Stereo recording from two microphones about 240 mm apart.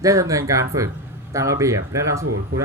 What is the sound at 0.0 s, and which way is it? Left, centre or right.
Speech, centre.